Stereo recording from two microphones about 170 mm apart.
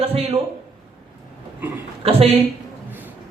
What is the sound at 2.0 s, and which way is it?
Speech, 35° right (ahead or behind).